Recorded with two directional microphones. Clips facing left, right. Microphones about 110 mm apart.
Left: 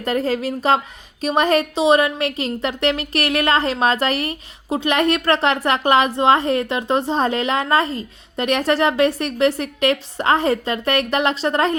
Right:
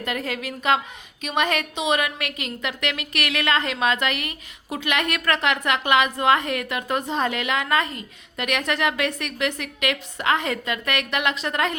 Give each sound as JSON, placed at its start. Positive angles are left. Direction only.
{"t": 0.0, "sound": "a woman's voice", "side_deg": 35}